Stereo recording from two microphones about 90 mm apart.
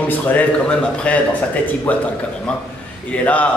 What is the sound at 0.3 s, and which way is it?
Speech, 15° left (ahead or behind).